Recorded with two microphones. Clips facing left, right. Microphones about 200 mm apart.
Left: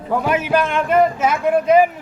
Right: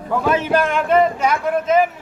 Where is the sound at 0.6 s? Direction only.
Centre (ahead or behind).